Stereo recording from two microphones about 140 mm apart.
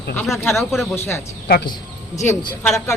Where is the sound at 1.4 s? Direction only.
90° left.